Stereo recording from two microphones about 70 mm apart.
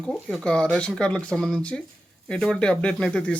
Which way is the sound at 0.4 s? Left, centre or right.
Centre.